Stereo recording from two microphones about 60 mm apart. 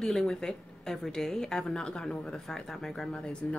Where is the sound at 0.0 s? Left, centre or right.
Centre.